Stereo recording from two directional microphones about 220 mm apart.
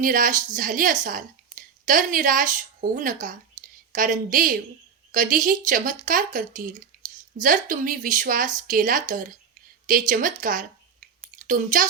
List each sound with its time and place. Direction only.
0.0 s a woman's voice: 40° right (ahead or behind)